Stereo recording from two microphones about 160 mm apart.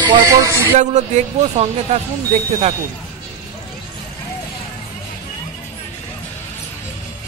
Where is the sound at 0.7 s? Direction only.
45° right (ahead or behind).